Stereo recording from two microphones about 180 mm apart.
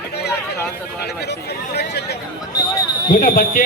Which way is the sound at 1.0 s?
65° left (ahead or behind).